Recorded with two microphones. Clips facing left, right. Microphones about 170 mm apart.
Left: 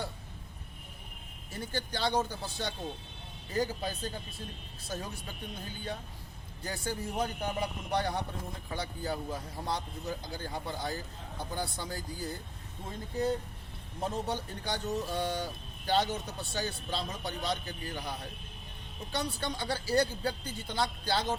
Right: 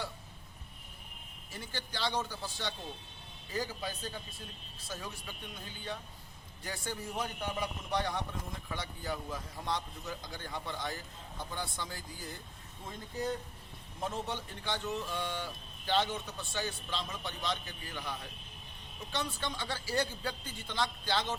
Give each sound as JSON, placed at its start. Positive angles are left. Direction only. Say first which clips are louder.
{"t": 1.5, "sound": "speech", "louder": "left 5 dB", "side_deg": 45}
{"t": 6.7, "sound": "speech", "louder": "left 4 dB", "side_deg": 35}
{"t": 14.0, "sound": "speech", "louder": "left 3 dB", "side_deg": 35}